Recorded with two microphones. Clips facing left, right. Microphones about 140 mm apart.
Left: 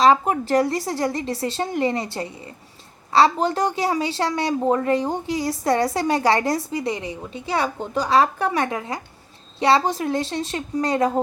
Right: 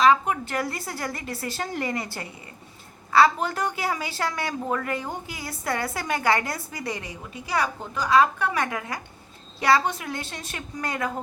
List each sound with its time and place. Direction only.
0.0 s a woman's voice: 35° left (ahead or behind)
3.1 s a woman's voice: 30° left (ahead or behind)